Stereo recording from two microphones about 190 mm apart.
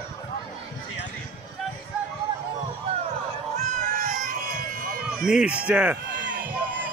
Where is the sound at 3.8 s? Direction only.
40° right (ahead or behind).